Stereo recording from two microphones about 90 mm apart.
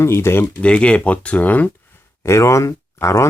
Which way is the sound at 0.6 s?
15° left (ahead or behind).